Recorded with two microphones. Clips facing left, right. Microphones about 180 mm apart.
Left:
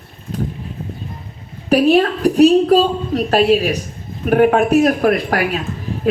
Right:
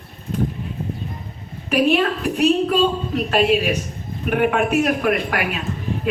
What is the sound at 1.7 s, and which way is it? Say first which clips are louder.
A woman's voice: left 5 dB; 35° left (ahead or behind).